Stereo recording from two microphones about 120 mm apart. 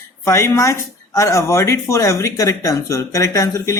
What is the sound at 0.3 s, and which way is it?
Speech, 25° left (ahead or behind).